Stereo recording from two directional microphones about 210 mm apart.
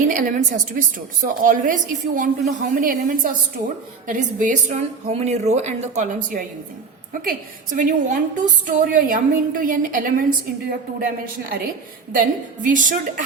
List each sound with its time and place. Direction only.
0.1 s a woman's voice: 40° right (ahead or behind)
12.1 s a woman's voice: 40° right (ahead or behind)